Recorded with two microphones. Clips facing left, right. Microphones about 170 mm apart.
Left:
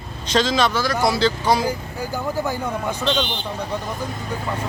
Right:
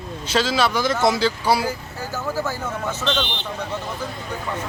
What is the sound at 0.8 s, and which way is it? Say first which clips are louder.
Speech: right 1 dB; 20° right (ahead or behind).